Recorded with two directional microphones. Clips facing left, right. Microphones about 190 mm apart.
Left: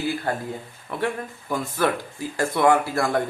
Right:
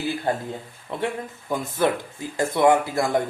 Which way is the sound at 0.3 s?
20° right (ahead or behind).